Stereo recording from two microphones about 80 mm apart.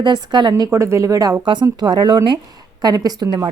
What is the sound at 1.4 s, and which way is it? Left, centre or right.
Speech, right.